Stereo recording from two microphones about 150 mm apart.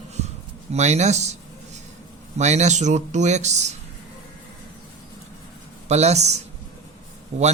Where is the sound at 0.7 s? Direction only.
50° right (ahead or behind).